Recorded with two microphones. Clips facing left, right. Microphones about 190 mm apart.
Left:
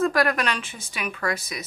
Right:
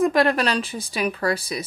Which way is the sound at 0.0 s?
25° right (ahead or behind).